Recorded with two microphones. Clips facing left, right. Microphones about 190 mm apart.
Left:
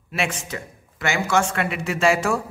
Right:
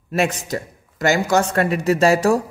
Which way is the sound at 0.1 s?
40° right (ahead or behind).